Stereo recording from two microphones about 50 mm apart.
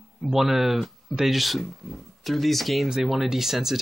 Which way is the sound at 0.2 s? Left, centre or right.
Centre.